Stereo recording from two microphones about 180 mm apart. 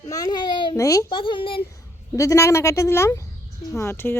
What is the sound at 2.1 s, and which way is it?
A woman's voice, 15° left (ahead or behind).